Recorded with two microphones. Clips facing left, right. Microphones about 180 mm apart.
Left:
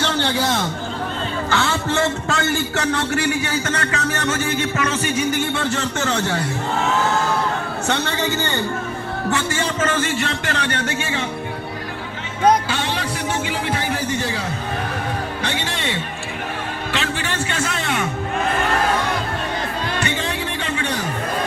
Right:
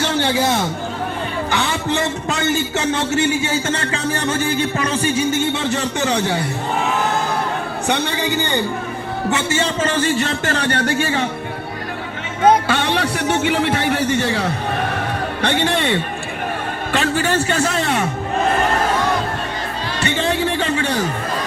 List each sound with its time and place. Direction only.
0.0 s a sound: 10° right (ahead or behind)
1.5 s a man's voice: 15° right (ahead or behind)
7.9 s speech: 15° right (ahead or behind); by 11.2 s 35° right (ahead or behind)
12.6 s music: 60° right (ahead or behind)
13.5 s a man's voice: 65° right (ahead or behind)
15.4 s music: 60° right (ahead or behind)
16.9 s a man's voice: 45° right (ahead or behind)
20.1 s music: 30° right (ahead or behind)